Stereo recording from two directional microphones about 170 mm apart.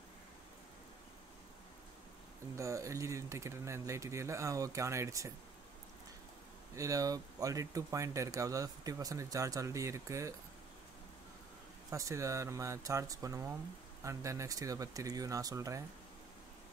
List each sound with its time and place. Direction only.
2.5 s speech: 20° right (ahead or behind)
6.7 s speech: 20° right (ahead or behind)
11.9 s speech: 20° right (ahead or behind)